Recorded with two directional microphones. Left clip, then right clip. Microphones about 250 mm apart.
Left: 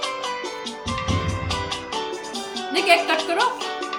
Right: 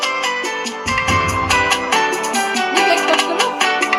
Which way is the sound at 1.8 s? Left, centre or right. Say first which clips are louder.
Right 12 dB; right.